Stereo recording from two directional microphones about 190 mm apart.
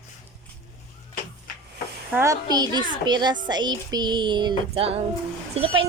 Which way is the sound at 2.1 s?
15° right (ahead or behind).